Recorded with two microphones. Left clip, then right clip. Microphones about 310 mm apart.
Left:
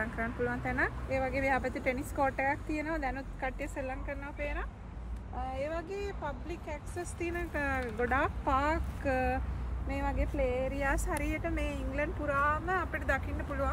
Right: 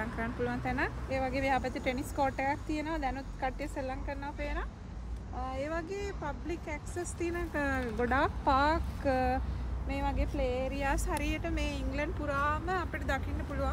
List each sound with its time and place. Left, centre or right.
0.0 s speech: centre